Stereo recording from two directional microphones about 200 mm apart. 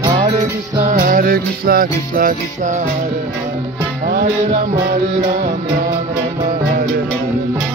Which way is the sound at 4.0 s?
50° right (ahead or behind).